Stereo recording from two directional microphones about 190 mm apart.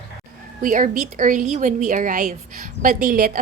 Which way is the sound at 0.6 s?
45° right (ahead or behind).